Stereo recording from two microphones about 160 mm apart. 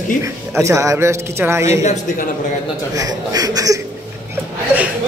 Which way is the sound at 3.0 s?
25° right (ahead or behind).